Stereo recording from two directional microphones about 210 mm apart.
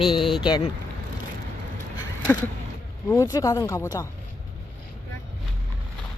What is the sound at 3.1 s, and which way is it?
Speech, 15° left (ahead or behind).